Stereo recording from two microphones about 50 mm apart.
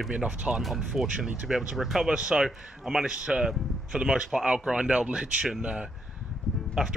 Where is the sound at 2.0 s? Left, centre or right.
Centre.